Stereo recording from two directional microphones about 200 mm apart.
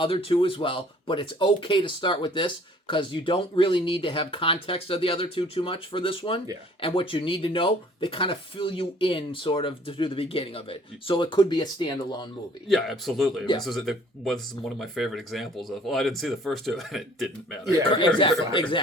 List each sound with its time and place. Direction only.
0.0 s speech: 25° left (ahead or behind)
12.6 s speech: centre (ahead or behind)
18.5 s speech: 25° left (ahead or behind)